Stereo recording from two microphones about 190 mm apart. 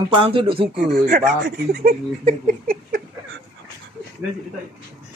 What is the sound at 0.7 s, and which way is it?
Speech, 55° right (ahead or behind).